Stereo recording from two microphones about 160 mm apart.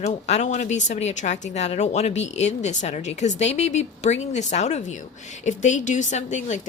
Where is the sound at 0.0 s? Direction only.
45° left (ahead or behind).